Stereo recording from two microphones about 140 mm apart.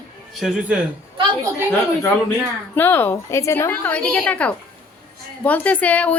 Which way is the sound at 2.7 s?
15° left (ahead or behind).